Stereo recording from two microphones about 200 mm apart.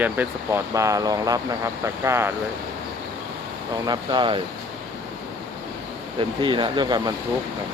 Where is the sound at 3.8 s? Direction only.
20° right (ahead or behind).